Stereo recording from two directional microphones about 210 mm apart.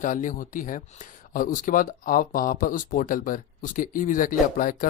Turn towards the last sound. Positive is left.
turn(degrees=40)  # may be behind; listen again after turning